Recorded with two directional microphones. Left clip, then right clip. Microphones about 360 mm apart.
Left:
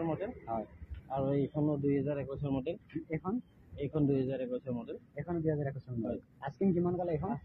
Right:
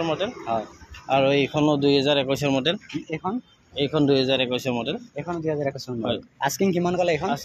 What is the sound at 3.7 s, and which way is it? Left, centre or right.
Speech, right.